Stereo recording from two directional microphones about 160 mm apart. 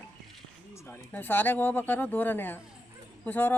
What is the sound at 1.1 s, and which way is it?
Speech, 10° left (ahead or behind).